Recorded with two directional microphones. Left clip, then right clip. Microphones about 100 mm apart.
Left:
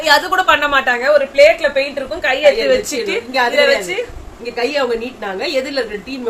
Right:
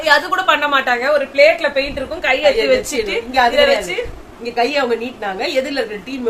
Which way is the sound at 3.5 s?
40° left (ahead or behind).